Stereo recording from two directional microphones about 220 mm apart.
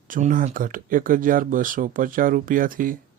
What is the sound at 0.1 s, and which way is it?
Speech, 35° right (ahead or behind).